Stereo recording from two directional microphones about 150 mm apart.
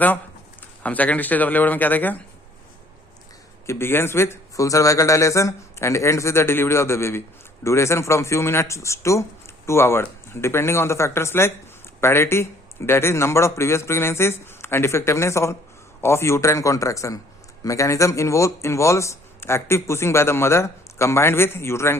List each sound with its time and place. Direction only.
0.8 s speech: 10° left (ahead or behind)
3.7 s speech: 15° left (ahead or behind)